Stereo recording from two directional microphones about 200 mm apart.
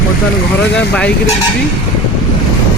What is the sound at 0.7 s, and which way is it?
Speech, 5° left (ahead or behind).